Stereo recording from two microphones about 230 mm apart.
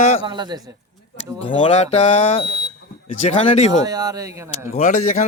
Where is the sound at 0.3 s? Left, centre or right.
Centre.